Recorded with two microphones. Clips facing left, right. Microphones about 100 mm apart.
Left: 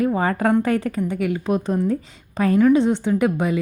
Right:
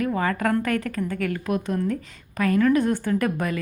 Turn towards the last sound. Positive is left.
turn(degrees=20)  # may be behind; listen again after turning